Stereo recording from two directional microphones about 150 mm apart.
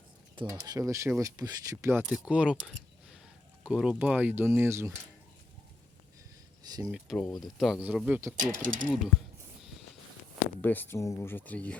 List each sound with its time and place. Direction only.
0.4 s speech: 25° right (ahead or behind)
6.6 s speech: 25° right (ahead or behind)
6.9 s speech: centre (ahead or behind)
8.4 s speech: 60° right (ahead or behind)
10.6 s speech: 15° left (ahead or behind)